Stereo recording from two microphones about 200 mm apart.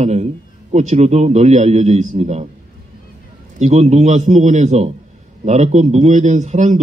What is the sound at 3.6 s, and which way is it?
A man's voice, 35° right (ahead or behind).